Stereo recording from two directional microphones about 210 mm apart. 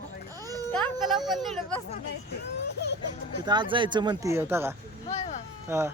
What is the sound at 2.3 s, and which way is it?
Speech, 55° left (ahead or behind).